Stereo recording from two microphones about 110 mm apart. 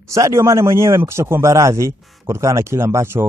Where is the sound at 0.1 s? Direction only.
25° right (ahead or behind).